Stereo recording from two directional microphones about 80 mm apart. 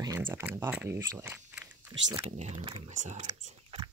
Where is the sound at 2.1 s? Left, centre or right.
Right.